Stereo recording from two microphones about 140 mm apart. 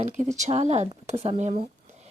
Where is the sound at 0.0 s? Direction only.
55° right (ahead or behind).